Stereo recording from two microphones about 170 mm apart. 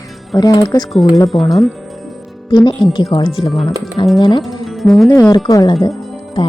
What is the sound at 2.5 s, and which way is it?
Speech, 25° left (ahead or behind).